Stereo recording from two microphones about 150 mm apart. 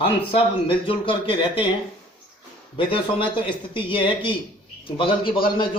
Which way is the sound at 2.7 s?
35° left (ahead or behind).